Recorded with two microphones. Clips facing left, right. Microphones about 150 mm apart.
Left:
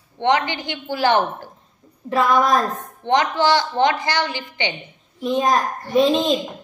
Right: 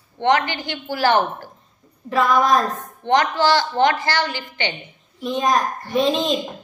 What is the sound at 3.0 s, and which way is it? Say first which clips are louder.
A woman's voice: even; 20° left (ahead or behind).